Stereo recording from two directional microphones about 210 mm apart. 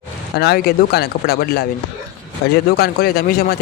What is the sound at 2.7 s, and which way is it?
Speech, 45° left (ahead or behind).